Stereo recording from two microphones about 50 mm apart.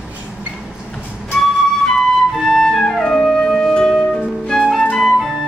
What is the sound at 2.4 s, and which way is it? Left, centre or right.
Flute, centre.